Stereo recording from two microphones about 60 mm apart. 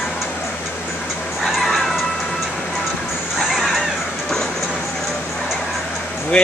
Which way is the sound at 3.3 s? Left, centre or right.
Centre.